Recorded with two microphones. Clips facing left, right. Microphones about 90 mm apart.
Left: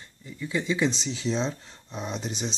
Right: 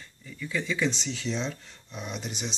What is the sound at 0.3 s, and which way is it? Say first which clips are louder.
Speech: left 3 dB; 20° left (ahead or behind).